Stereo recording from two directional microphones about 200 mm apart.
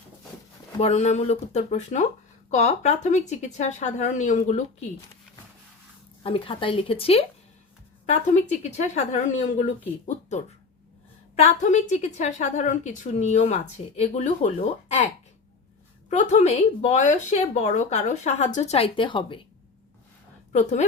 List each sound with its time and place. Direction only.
0.8 s a woman's voice: 35° left (ahead or behind)
6.2 s a woman's voice: 25° left (ahead or behind)
16.0 s a woman's voice: 35° left (ahead or behind)
20.5 s a woman's voice: 35° left (ahead or behind)